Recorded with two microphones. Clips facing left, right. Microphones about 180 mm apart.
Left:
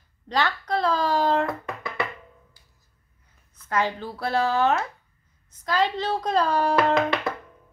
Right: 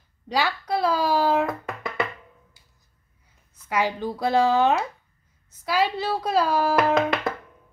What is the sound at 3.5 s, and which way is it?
A child's voice, 10° right (ahead or behind).